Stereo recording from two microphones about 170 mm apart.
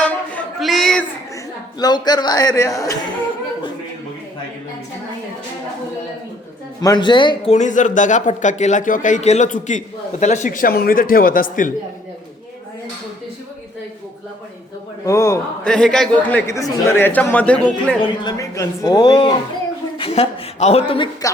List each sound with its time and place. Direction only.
0.0 s a sound: 5° left (ahead or behind)
1.8 s speech: 25° left (ahead or behind)
6.8 s speech: 25° left (ahead or behind)
7.5 s a man's voice: 45° left (ahead or behind)
15.0 s speech: 20° left (ahead or behind)
15.6 s speech: 5° left (ahead or behind)
18.2 s speech: 20° left (ahead or behind)
20.0 s speech: 40° left (ahead or behind)